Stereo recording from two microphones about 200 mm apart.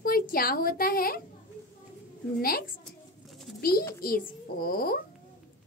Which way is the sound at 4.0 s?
45° left (ahead or behind).